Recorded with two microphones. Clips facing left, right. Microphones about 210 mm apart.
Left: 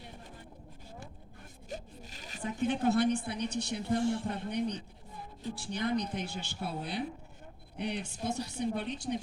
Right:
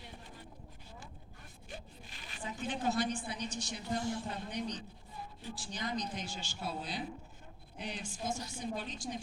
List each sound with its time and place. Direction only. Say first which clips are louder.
1.7 s zipper: left 6 dB; 40° left (ahead or behind)
2.4 s a woman's voice: left 7 dB; 60° left (ahead or behind)